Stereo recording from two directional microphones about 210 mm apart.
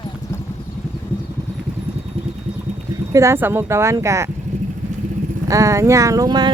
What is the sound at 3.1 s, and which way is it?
Speech, 15° right (ahead or behind).